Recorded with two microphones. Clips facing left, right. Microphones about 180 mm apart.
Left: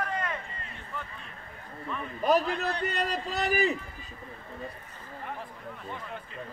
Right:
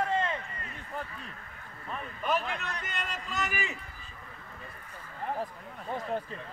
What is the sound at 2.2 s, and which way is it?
A man's voice, 35° left (ahead or behind).